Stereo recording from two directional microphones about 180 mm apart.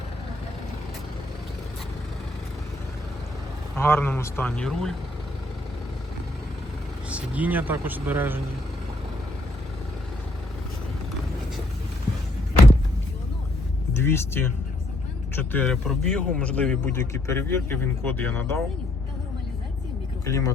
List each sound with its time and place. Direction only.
3.8 s a man's voice: 10° left (ahead or behind)
7.1 s speech: 10° right (ahead or behind)
13.9 s a man's voice: 15° left (ahead or behind)
20.2 s a man's voice: 15° left (ahead or behind)